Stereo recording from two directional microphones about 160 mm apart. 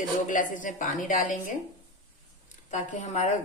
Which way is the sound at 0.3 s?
55° left (ahead or behind).